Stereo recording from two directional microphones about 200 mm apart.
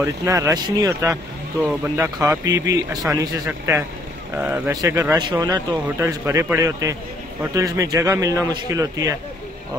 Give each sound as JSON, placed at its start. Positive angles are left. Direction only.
{"t": 0.0, "sound": "a man's voice", "side_deg": -15}